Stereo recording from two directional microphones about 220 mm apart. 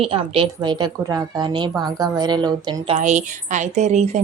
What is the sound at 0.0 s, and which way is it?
A woman's voice, 25° right (ahead or behind).